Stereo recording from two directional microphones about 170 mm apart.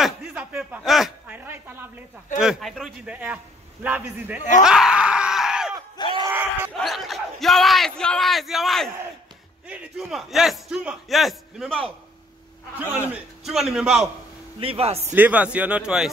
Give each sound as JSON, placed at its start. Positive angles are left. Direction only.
{"t": 0.0, "sound": "a sound", "side_deg": -5}
{"t": 2.4, "sound": "a man's voice", "side_deg": 0}
{"t": 4.4, "sound": "speech", "side_deg": 45}
{"t": 4.6, "sound": "screaming", "side_deg": -5}
{"t": 5.9, "sound": "speech", "side_deg": 30}
{"t": 6.2, "sound": "speech", "side_deg": -15}
{"t": 6.7, "sound": "a man's voice", "side_deg": 0}
{"t": 13.5, "sound": "a man's voice", "side_deg": -5}
{"t": 14.6, "sound": "a man's voice", "side_deg": -35}
{"t": 15.1, "sound": "speech", "side_deg": -10}